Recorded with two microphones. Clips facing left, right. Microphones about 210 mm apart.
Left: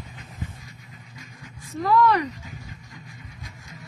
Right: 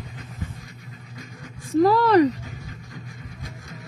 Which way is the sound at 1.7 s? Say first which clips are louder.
Right 4 dB; 35° right (ahead or behind).